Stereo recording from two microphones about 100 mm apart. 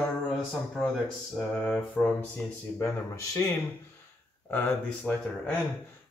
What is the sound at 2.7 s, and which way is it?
Speech, 30° left (ahead or behind).